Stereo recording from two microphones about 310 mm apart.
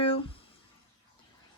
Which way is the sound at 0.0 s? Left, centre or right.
Centre.